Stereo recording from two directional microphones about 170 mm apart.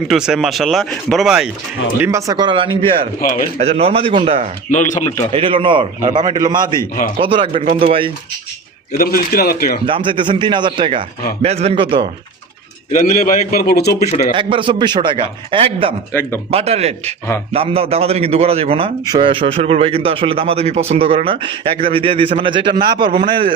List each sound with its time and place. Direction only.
0.1 s speech: 5° right (ahead or behind)
2.0 s a man's voice: 20° right (ahead or behind)
4.7 s speech: 45° left (ahead or behind)
5.3 s a man's voice: 30° right (ahead or behind)
8.9 s a man's voice: 60° left (ahead or behind)
9.8 s a man's voice: 30° right (ahead or behind)
12.9 s a man's voice: 50° left (ahead or behind); by 13.9 s 65° left (ahead or behind)
14.3 s a man's voice: 30° right (ahead or behind)